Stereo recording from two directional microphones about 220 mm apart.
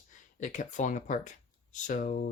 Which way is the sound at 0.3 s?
35° left (ahead or behind).